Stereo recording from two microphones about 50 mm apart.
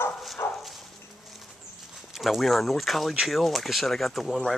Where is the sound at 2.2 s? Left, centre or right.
Centre.